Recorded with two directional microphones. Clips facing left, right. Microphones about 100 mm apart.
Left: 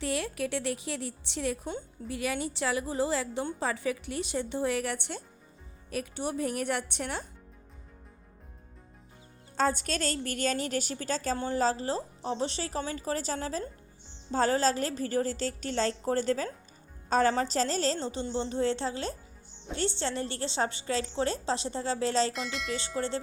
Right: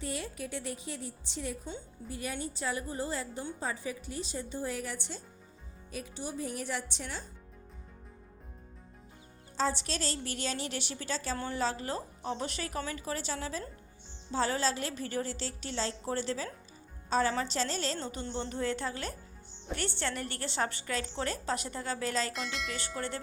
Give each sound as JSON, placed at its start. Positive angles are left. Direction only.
{"t": 0.0, "sound": "a woman's voice", "side_deg": 75}
{"t": 9.6, "sound": "a woman's voice", "side_deg": 50}
{"t": 22.3, "sound": "speech", "side_deg": 0}
{"t": 23.0, "sound": "a woman's voice", "side_deg": 25}